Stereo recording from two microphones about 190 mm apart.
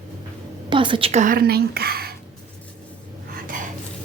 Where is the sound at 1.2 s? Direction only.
50° right (ahead or behind).